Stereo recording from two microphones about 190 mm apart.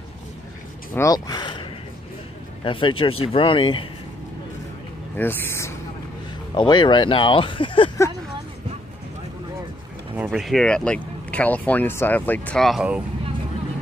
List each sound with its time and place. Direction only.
0.9 s speech: 20° left (ahead or behind)
5.1 s speech: 10° left (ahead or behind)
6.5 s speech: 25° left (ahead or behind)
10.1 s speech: 5° right (ahead or behind)